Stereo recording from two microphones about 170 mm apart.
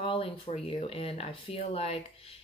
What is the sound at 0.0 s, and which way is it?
Speech, 30° left (ahead or behind).